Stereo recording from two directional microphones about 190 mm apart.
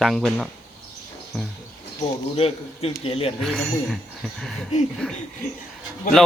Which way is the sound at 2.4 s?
30° left (ahead or behind).